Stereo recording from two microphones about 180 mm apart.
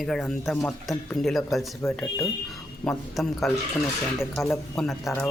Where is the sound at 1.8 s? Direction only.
15° left (ahead or behind).